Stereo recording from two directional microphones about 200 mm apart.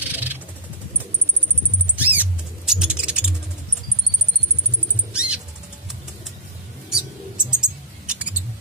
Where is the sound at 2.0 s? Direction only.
10° right (ahead or behind).